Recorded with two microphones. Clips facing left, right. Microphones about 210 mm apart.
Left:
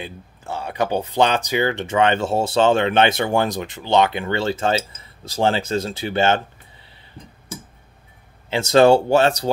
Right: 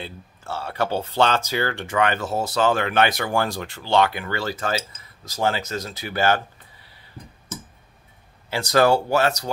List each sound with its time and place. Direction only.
0.0 s speech: 15° left (ahead or behind)
8.5 s speech: 25° left (ahead or behind)